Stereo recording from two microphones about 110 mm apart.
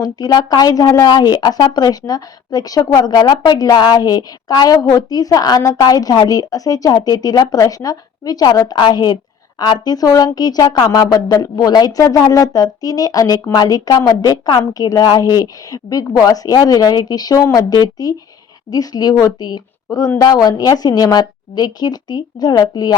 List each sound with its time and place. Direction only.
0.0 s a woman's voice: 35° left (ahead or behind)